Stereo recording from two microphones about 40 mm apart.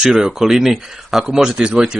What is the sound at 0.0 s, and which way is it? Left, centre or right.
Speech, centre.